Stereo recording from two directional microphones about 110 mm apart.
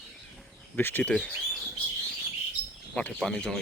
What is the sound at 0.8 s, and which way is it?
Speech, 20° left (ahead or behind).